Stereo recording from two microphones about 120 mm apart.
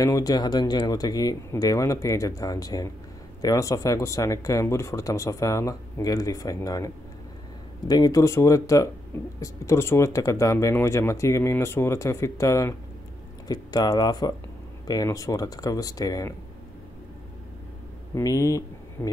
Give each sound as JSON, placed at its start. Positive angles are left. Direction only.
{"t": 0.0, "sound": "speech", "side_deg": 30}
{"t": 7.9, "sound": "speech", "side_deg": 30}
{"t": 18.1, "sound": "speech", "side_deg": 30}